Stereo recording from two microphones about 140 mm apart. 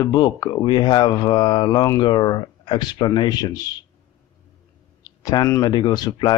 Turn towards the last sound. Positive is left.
turn(degrees=30)  # may be behind; listen again after turning